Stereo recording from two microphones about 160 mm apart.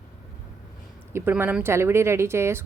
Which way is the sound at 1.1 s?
15° right (ahead or behind).